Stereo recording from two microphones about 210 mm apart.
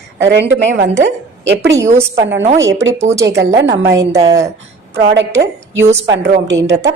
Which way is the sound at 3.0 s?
15° right (ahead or behind).